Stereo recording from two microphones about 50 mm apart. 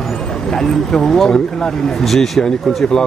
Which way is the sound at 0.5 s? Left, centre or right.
Centre.